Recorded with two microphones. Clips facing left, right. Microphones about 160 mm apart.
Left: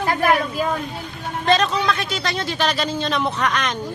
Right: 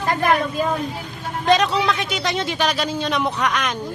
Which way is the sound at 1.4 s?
15° right (ahead or behind).